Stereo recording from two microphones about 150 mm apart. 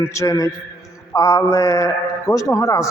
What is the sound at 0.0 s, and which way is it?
A man's voice, 20° left (ahead or behind).